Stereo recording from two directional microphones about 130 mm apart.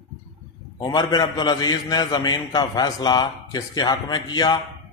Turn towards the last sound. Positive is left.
turn(degrees=35)  # may be behind; listen again after turning